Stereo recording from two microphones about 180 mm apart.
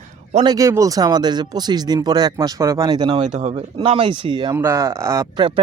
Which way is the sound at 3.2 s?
40° right (ahead or behind).